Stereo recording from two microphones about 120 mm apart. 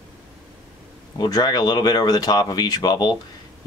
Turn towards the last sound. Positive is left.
turn(degrees=35)  # may be behind; listen again after turning